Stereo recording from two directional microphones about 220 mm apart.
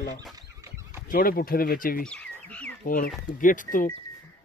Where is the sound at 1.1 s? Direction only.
40° left (ahead or behind).